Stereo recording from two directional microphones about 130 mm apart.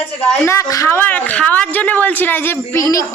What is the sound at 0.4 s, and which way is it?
Speech, 25° left (ahead or behind).